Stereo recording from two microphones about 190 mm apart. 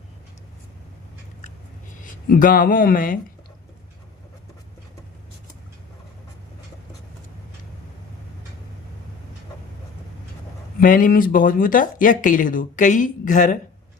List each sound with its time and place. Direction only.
2.3 s speech: 45° left (ahead or behind)
10.8 s speech: 45° left (ahead or behind)